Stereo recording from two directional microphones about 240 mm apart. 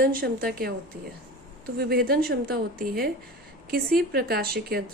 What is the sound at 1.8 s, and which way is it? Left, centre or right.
Speech, right.